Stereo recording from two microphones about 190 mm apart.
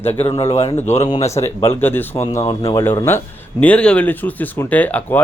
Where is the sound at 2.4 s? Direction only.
30° left (ahead or behind).